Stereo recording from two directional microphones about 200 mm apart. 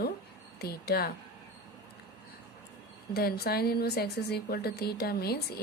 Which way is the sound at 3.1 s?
50° left (ahead or behind).